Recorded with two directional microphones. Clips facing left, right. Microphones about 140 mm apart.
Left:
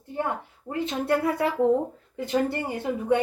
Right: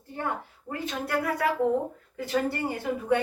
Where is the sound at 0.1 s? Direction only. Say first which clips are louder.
Left 5 dB; 20° left (ahead or behind).